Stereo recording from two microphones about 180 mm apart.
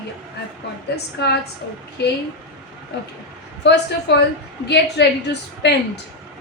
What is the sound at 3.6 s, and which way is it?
A woman's voice, 70° left (ahead or behind).